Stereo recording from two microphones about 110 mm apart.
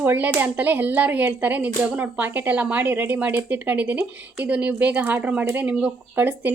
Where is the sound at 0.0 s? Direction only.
15° right (ahead or behind).